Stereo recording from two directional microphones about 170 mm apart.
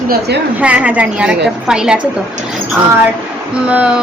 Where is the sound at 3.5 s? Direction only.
5° right (ahead or behind).